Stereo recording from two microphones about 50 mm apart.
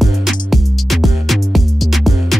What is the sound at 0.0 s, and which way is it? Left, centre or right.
Music, centre.